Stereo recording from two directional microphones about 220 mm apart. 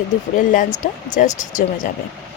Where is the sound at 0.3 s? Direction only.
35° left (ahead or behind).